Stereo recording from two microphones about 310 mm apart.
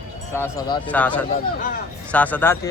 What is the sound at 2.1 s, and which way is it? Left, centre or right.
Speech, centre.